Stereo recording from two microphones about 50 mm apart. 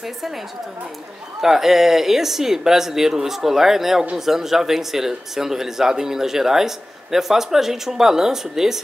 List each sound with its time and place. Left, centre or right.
1.4 s speech: centre